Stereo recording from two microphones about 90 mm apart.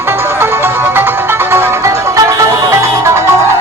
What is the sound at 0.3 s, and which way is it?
Music, 25° right (ahead or behind).